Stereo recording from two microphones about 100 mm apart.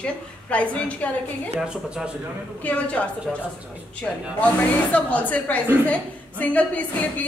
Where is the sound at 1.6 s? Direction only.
10° right (ahead or behind).